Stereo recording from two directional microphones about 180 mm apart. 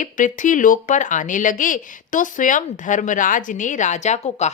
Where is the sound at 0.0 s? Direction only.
45° left (ahead or behind).